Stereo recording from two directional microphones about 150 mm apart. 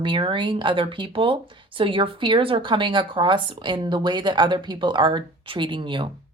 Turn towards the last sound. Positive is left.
turn(degrees=-30)  # may be behind; listen again after turning